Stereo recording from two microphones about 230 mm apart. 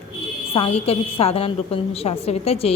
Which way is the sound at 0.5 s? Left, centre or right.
Left.